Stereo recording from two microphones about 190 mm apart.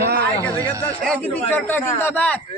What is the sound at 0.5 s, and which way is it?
Speech, 20° right (ahead or behind).